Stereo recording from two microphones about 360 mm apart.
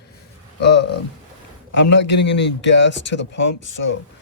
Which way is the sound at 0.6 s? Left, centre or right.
Left.